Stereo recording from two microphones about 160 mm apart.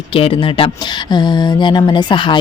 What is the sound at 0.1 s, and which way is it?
Speech, 35° left (ahead or behind).